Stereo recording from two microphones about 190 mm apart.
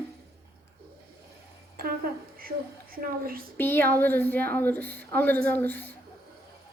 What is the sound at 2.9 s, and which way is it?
Speech, 50° right (ahead or behind).